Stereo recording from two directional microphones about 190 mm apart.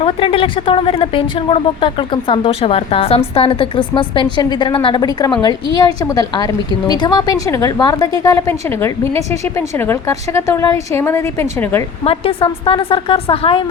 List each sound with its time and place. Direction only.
0.0 s a woman's voice: 30° left (ahead or behind); by 11.8 s 15° left (ahead or behind)
12.0 s a woman's voice: 30° left (ahead or behind)